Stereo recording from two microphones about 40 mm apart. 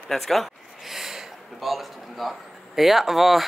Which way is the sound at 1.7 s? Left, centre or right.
Centre.